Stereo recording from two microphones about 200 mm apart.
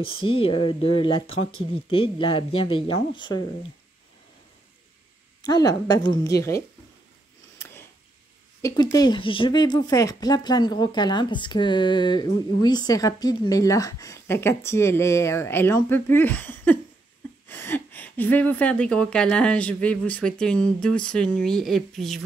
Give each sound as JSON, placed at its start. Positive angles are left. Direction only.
{"t": 0.0, "sound": "speech", "side_deg": 25}
{"t": 5.4, "sound": "speech", "side_deg": 20}
{"t": 7.5, "sound": "a sound", "side_deg": 10}
{"t": 8.9, "sound": "a woman's voice", "side_deg": 20}